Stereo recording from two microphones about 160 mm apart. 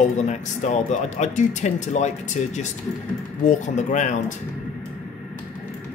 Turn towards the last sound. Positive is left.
turn(degrees=50)  # may be behind; listen again after turning